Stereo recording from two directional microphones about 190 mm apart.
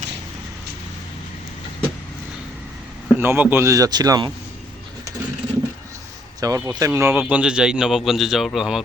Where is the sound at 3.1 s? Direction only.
10° right (ahead or behind).